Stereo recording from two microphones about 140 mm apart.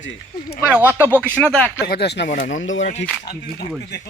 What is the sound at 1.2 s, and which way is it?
Speech, 10° left (ahead or behind).